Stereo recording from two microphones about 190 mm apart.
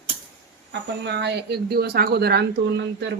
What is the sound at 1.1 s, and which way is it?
Speech, 60° right (ahead or behind).